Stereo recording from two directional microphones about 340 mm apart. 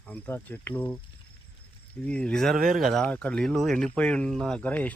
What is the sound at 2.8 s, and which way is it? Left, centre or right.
Speech, centre.